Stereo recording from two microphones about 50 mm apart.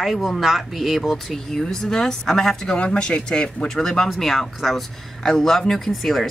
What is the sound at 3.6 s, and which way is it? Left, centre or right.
Speech, centre.